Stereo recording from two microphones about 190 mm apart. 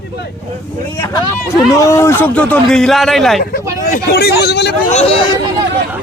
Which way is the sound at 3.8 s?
50° left (ahead or behind).